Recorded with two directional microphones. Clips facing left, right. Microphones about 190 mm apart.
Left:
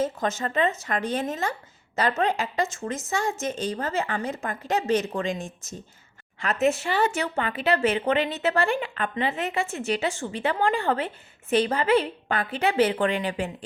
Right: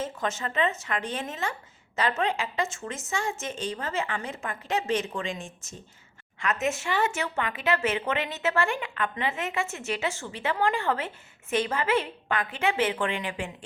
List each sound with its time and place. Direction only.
0.0 s a woman's voice: 40° left (ahead or behind)